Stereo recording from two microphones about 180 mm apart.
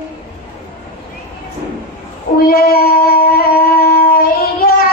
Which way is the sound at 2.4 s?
55° left (ahead or behind).